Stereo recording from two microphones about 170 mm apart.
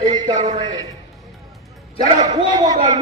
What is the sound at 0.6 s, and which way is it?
Speech, 25° right (ahead or behind).